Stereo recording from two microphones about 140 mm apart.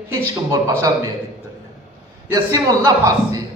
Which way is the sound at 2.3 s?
25° right (ahead or behind).